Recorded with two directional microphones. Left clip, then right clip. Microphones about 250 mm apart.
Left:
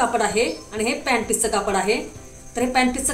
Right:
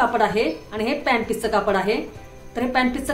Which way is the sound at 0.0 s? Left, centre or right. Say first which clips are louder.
Right 1 dB; right.